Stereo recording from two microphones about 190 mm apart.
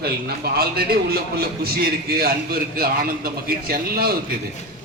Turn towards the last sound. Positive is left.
turn(degrees=-50)  # may be behind; listen again after turning